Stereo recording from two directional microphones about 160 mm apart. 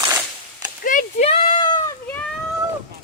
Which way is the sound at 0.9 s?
55° left (ahead or behind).